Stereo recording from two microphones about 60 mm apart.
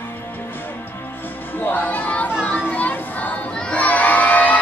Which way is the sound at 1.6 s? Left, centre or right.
Left.